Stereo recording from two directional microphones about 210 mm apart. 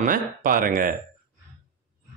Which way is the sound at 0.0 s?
40° right (ahead or behind).